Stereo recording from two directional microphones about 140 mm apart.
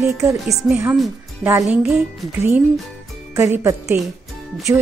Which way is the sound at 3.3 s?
15° right (ahead or behind).